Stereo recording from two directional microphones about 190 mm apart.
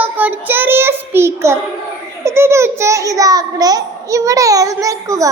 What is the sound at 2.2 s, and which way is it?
A child's voice, 15° right (ahead or behind).